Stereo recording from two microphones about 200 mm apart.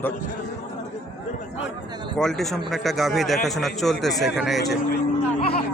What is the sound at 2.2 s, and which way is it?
A man's voice, centre (ahead or behind).